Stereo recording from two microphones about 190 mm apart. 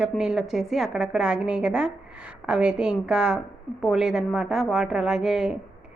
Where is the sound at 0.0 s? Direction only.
5° right (ahead or behind).